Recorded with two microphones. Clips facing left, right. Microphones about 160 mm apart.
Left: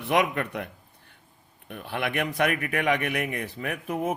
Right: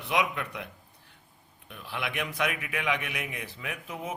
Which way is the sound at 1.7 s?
55° left (ahead or behind).